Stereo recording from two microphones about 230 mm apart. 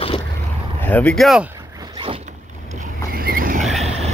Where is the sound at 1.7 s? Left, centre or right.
Right.